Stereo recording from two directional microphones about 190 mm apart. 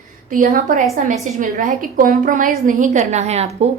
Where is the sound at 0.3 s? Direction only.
45° right (ahead or behind).